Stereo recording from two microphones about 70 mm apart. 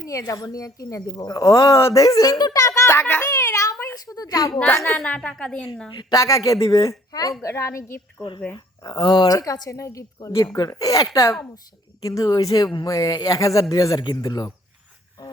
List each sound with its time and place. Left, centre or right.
0.1 s speech: left
3.3 s a sound: left
3.9 s speech: left
4.7 s a child's voice: left
4.9 s a woman's voice: centre
5.9 s a woman's voice: left
6.1 s a woman's voice: left
7.4 s a woman's voice: left
8.5 s a woman's voice: left
14.1 s speech: left